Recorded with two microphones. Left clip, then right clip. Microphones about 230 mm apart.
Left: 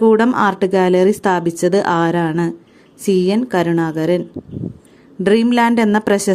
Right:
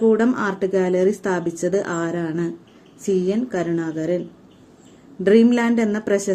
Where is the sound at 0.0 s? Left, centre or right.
Left.